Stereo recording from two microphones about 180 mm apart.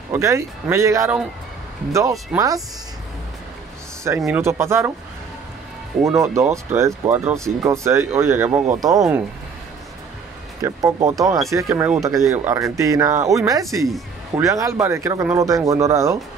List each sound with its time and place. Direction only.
0.1 s speech: 15° right (ahead or behind)
4.3 s speech: 15° right (ahead or behind)
6.1 s speech: 15° right (ahead or behind)
8.7 s speech: 20° right (ahead or behind)
10.6 s speech: 20° right (ahead or behind)